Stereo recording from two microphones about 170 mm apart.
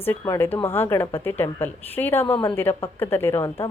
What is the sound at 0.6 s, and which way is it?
A woman's voice, 15° left (ahead or behind).